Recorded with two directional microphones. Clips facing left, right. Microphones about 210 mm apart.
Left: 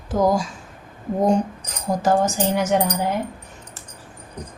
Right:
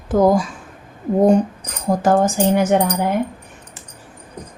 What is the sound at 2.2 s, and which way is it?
Speech, 55° right (ahead or behind).